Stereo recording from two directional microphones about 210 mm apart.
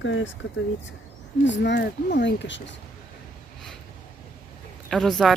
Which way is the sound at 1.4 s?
60° left (ahead or behind).